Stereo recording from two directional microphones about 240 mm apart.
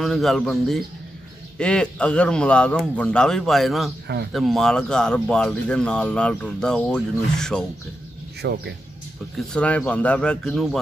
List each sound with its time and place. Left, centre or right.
0.0 s speech: centre
8.4 s speech: right
9.5 s speech: centre